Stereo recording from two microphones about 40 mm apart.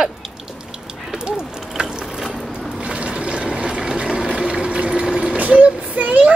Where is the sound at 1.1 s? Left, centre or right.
Right.